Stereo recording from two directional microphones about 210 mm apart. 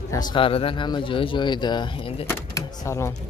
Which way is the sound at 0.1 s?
20° left (ahead or behind).